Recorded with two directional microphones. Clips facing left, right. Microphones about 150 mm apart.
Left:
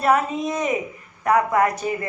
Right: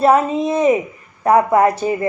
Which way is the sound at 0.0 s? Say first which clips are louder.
Right 6 dB; 30° right (ahead or behind).